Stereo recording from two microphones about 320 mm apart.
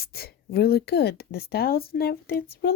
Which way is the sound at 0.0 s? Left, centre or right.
Left.